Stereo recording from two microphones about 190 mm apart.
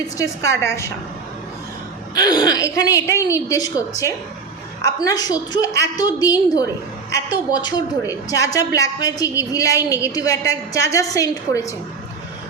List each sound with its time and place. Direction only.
0.2 s a woman's voice: 15° left (ahead or behind)
2.1 s a woman's voice: 20° left (ahead or behind)